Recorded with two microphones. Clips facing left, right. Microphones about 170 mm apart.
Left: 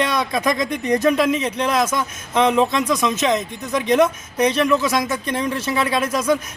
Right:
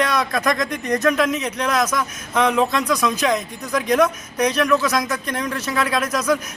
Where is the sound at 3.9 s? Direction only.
25° left (ahead or behind).